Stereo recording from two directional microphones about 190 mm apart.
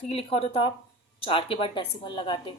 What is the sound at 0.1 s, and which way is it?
Speech, 30° left (ahead or behind).